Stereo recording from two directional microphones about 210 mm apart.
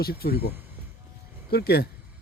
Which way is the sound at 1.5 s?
50° left (ahead or behind).